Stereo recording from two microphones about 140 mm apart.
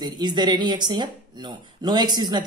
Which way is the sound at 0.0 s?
30° right (ahead or behind).